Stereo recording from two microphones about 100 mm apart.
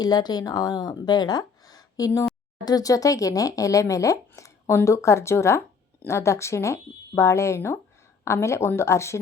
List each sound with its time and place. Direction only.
0.0 s speech: 45° left (ahead or behind); by 9.1 s 30° left (ahead or behind)